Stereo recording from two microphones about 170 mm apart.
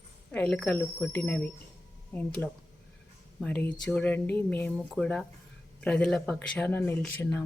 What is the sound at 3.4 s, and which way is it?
A woman's voice, 10° left (ahead or behind).